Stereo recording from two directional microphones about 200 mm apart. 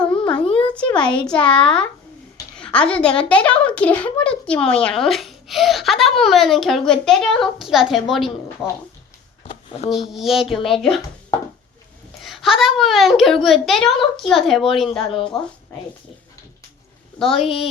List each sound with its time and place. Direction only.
0.0 s a sound: 5° left (ahead or behind)
0.6 s a woman's voice: 5° left (ahead or behind)
9.5 s a sound: 30° left (ahead or behind)
9.9 s a woman's voice: centre (ahead or behind)
12.2 s a woman's voice: centre (ahead or behind)
17.2 s a woman's voice: centre (ahead or behind)